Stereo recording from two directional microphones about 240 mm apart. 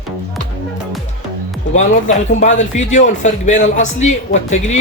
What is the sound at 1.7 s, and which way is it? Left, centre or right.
A man's voice, left.